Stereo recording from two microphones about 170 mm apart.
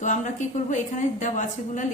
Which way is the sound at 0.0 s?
45° left (ahead or behind).